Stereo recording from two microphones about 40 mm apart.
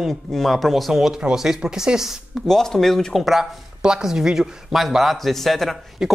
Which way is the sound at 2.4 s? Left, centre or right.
Centre.